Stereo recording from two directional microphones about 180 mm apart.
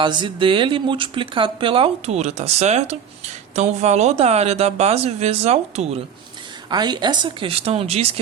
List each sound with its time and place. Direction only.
0.0 s speech: 25° right (ahead or behind)
6.7 s speech: 25° right (ahead or behind)